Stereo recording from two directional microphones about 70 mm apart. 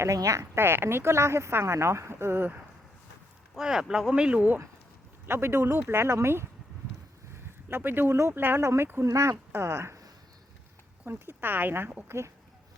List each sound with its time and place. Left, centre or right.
0.0 s speech: right
0.5 s speech: right
3.5 s speech: centre; by 4.6 s right
5.2 s speech: right
7.7 s speech: right
8.1 s speech: right
8.4 s speech: right
8.6 s speech: right
11.0 s speech: right
12.0 s speech: right